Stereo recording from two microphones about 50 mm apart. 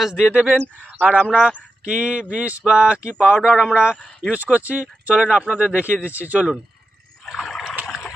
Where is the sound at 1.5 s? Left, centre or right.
Right.